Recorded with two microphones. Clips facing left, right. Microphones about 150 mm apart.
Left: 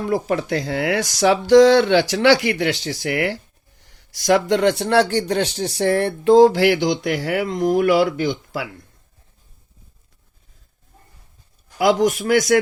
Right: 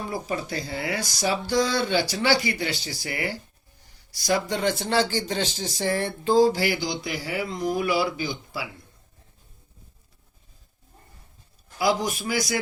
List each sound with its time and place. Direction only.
0.0 s speech: 90° left
11.8 s speech: 85° left